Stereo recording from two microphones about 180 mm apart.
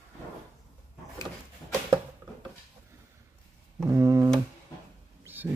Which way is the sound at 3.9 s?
15° right (ahead or behind).